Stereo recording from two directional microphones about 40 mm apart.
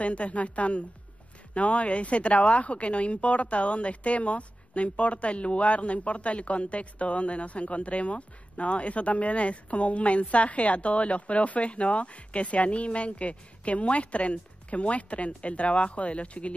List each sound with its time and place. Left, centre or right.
0.0 s speech: left